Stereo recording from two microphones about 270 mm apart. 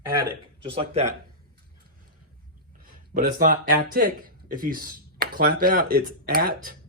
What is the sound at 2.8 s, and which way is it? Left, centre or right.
Speech, right.